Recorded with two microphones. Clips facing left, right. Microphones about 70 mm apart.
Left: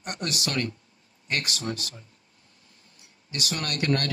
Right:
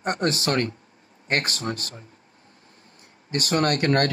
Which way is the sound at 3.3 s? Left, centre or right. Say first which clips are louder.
Right 10 dB; right.